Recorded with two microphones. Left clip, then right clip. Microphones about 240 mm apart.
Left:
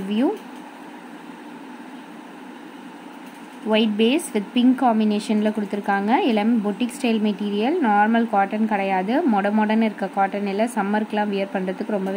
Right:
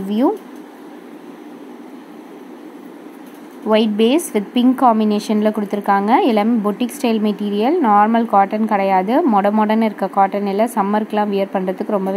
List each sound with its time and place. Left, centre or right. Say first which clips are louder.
3.6 s speech: right 5 dB; centre
5.0 s a woman's voice: right 5 dB; centre
5.3 s speech: right 5 dB; centre